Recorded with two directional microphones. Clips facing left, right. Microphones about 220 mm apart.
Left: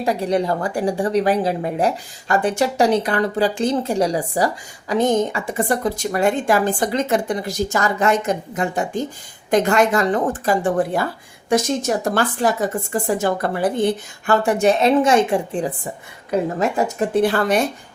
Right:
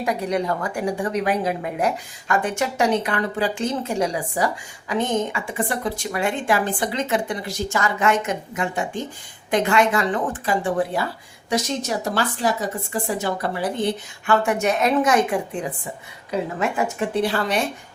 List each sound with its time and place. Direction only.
0.0 s a woman's voice: 30° left (ahead or behind); by 13.8 s 50° left (ahead or behind)
14.3 s a woman's voice: 35° left (ahead or behind)
16.3 s a woman's voice: 40° left (ahead or behind)